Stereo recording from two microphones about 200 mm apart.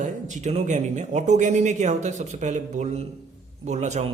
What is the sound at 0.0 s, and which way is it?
A man's voice, 35° right (ahead or behind).